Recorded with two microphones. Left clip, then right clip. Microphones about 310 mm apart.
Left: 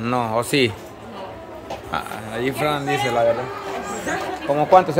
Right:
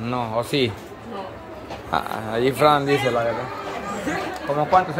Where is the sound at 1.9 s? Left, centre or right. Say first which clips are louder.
Right 4 dB; centre.